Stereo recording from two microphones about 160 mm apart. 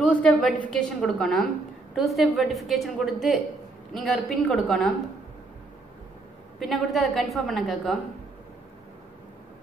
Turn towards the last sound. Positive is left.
turn(degrees=0)  # may be behind; listen again after turning